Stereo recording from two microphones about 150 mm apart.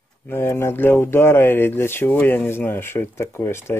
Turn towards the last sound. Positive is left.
turn(degrees=15)  # may be behind; listen again after turning